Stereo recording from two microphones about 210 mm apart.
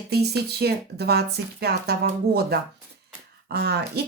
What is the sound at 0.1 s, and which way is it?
Speech, 50° right (ahead or behind).